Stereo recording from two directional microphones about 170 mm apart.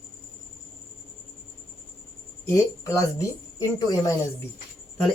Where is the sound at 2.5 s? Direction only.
20° left (ahead or behind).